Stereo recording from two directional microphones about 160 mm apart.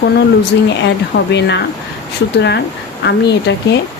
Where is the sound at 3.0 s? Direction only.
90° left.